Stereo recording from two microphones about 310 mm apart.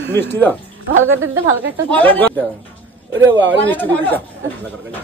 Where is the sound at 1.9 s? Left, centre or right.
Centre.